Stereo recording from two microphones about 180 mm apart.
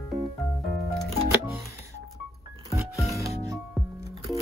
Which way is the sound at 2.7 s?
15° left (ahead or behind).